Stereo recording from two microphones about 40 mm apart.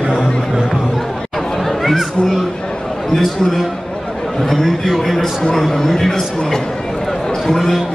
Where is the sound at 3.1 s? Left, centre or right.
Centre.